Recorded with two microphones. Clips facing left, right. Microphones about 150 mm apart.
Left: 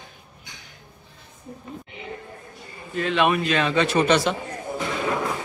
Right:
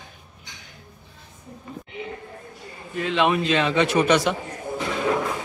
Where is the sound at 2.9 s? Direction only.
15° right (ahead or behind).